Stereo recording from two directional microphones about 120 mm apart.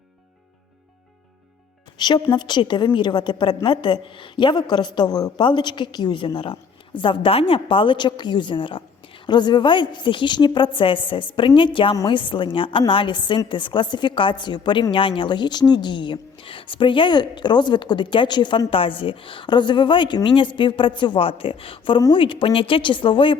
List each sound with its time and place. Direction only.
2.0 s a woman's voice: 35° left (ahead or behind)